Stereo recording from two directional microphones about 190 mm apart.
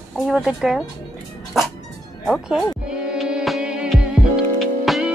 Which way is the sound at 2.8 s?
Centre (ahead or behind).